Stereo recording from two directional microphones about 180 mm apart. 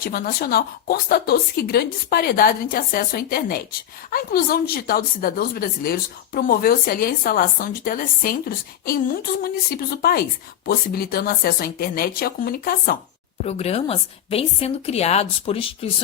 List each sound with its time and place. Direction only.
0.0 s a woman's voice: 55° left (ahead or behind)
13.4 s a woman's voice: 35° left (ahead or behind)